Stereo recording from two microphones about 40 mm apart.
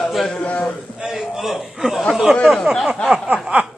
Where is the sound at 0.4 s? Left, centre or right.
Left.